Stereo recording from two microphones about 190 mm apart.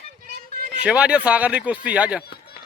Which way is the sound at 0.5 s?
45° right (ahead or behind).